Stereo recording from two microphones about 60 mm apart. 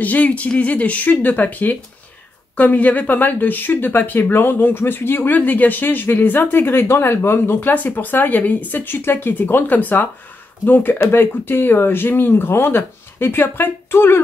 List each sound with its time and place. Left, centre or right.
0.0 s speech: left
7.7 s speech: left